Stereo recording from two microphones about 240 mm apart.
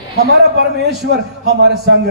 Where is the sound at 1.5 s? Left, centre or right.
Right.